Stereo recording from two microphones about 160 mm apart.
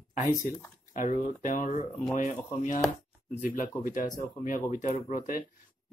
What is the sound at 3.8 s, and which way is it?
Speech, 55° left (ahead or behind).